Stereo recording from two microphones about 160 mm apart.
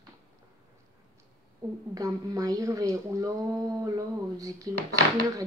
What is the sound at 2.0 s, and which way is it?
Speech, 20° right (ahead or behind).